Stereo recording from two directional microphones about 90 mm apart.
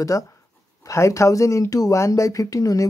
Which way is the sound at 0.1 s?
40° left (ahead or behind).